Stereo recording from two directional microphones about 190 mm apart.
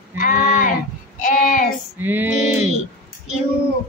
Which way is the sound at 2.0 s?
10° right (ahead or behind).